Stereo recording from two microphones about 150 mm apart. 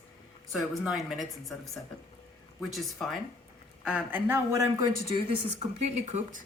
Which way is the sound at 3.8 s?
10° right (ahead or behind).